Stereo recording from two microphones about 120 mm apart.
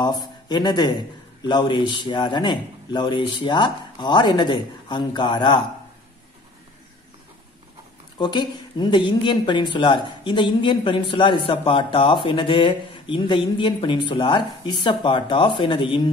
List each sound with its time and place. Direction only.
0.0 s a man's voice: 35° left (ahead or behind)
8.2 s a woman's voice: 40° left (ahead or behind)